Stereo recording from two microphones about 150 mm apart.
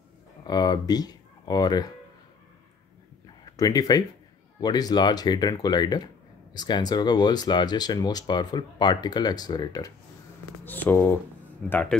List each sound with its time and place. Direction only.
0.4 s speech: 25° left (ahead or behind)
3.5 s speech: 25° left (ahead or behind)
10.6 s a man's voice: 10° left (ahead or behind)